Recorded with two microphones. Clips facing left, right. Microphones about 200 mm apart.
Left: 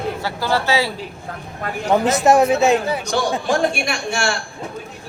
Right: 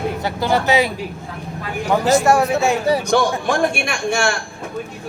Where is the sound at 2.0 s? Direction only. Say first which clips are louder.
Even; 20° left (ahead or behind).